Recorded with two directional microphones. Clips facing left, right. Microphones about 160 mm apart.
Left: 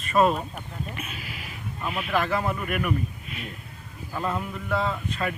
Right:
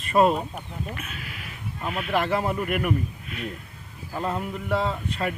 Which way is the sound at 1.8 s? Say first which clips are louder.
Right 1 dB; 5° left (ahead or behind).